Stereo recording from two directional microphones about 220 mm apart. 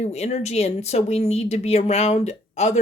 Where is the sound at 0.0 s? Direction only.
30° left (ahead or behind).